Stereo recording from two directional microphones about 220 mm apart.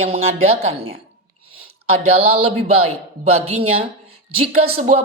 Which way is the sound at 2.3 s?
25° right (ahead or behind).